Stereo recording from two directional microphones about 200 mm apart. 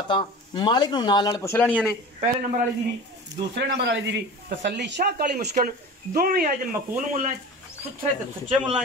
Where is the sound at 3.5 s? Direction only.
60° right (ahead or behind).